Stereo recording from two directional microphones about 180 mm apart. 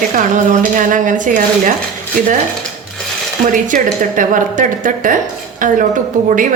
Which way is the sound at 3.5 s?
45° right (ahead or behind).